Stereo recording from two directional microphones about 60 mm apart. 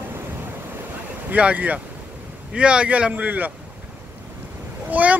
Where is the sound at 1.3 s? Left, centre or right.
Right.